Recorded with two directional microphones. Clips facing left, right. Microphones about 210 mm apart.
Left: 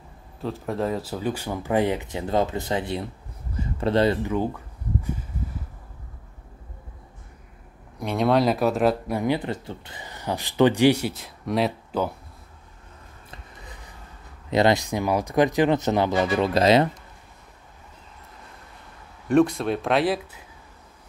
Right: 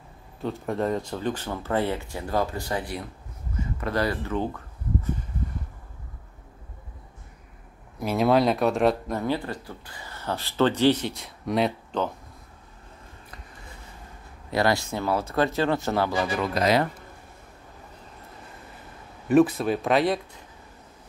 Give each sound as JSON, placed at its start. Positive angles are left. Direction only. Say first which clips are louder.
{"t": 0.4, "sound": "speech", "louder": "even", "side_deg": 0}
{"t": 4.3, "sound": "speech", "louder": "left 3 dB", "side_deg": 10}
{"t": 8.0, "sound": "speech", "louder": "even", "side_deg": -5}
{"t": 14.5, "sound": "speech", "louder": "left 4 dB", "side_deg": 20}
{"t": 19.2, "sound": "speech", "louder": "even", "side_deg": -5}